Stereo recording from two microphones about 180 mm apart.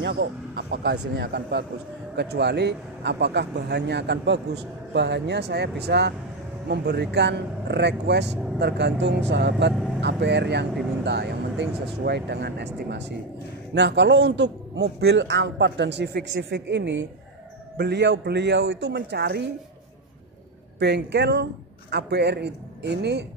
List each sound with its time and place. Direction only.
0.0 s speech: 70° right (ahead or behind)
20.8 s speech: 70° right (ahead or behind)